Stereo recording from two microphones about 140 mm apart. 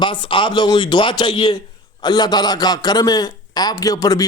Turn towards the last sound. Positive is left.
turn(degrees=25)  # may be behind; listen again after turning